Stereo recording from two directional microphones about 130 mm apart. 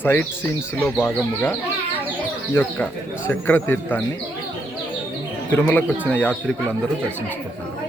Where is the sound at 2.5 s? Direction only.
15° left (ahead or behind).